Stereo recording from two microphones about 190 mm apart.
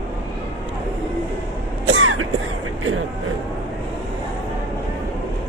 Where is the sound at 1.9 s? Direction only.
90° right.